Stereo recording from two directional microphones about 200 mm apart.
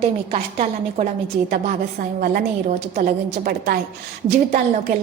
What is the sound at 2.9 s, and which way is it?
Speech, 45° right (ahead or behind).